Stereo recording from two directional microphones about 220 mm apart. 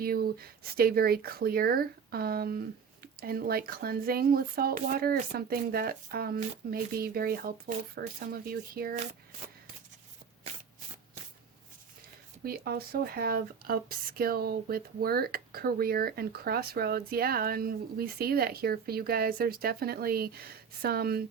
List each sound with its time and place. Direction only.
0.0 s speech: 45° right (ahead or behind)
12.5 s speech: 45° right (ahead or behind)